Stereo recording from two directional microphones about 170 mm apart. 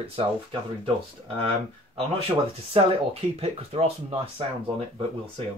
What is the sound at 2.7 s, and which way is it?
Speech, 35° right (ahead or behind).